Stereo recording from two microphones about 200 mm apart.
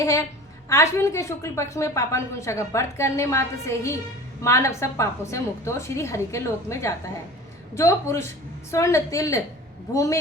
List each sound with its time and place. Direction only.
0.0 s a woman's voice: 15° left (ahead or behind)